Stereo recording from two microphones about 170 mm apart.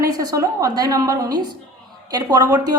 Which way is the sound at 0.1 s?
20° right (ahead or behind).